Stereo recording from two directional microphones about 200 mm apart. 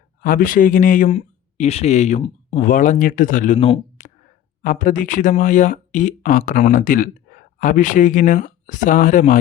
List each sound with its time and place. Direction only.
0.2 s speech: 45° left (ahead or behind)